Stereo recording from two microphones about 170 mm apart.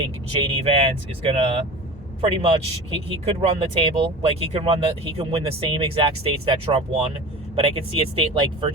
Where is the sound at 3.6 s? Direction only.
30° right (ahead or behind).